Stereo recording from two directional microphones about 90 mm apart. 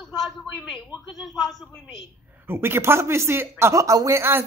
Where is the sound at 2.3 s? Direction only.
25° right (ahead or behind).